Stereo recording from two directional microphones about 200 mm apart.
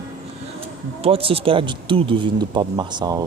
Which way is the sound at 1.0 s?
30° right (ahead or behind).